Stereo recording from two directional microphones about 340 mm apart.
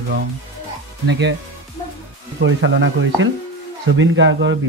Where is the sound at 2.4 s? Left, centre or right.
Right.